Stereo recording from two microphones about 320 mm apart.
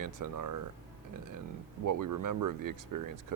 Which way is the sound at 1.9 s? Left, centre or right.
Right.